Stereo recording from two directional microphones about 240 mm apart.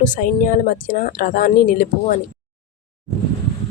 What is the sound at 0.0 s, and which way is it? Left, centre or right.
Speech, left.